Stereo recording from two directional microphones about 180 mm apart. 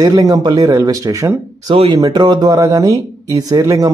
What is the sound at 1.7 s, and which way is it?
Speech, 30° right (ahead or behind).